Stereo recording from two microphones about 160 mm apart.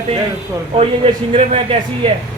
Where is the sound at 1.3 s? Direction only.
35° right (ahead or behind).